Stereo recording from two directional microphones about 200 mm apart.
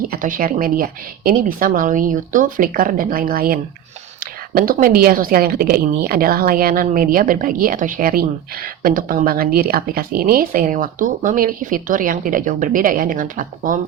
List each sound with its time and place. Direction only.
0.0 s a woman's voice: 45° right (ahead or behind)